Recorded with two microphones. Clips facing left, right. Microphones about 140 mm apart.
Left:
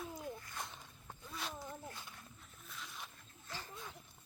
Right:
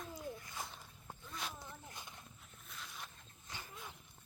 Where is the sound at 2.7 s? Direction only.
Centre (ahead or behind).